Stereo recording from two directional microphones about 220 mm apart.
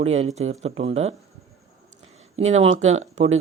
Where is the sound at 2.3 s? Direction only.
30° right (ahead or behind).